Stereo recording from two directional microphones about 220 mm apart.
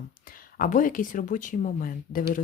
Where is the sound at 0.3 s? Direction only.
40° left (ahead or behind).